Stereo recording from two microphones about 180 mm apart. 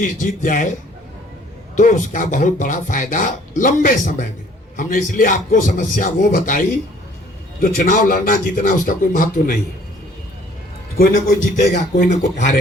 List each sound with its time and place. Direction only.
0.0 s speech: 45° left (ahead or behind)
1.7 s speech: 45° left (ahead or behind)
10.9 s speech: 55° left (ahead or behind)